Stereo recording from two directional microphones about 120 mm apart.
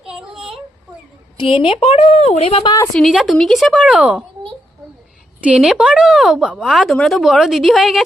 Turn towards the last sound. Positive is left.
turn(degrees=0)  # may be behind; listen again after turning